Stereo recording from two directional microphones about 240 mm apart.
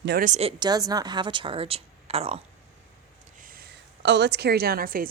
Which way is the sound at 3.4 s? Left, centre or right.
Right.